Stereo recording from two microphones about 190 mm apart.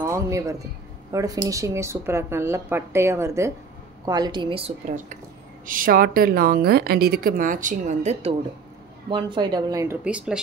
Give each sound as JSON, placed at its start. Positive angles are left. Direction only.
{"t": 0.0, "sound": "speech", "side_deg": -15}
{"t": 9.1, "sound": "speech", "side_deg": -25}
{"t": 10.0, "sound": "speech", "side_deg": -5}